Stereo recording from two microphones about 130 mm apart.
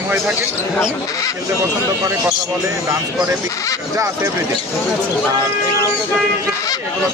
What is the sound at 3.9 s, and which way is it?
Speech, 25° right (ahead or behind).